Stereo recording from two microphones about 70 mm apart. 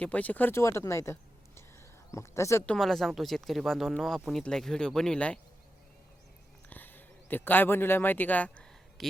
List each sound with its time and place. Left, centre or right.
0.0 s speech: left
0.5 s speech: left
2.7 s speech: centre
6.7 s speech: left
9.0 s speech: centre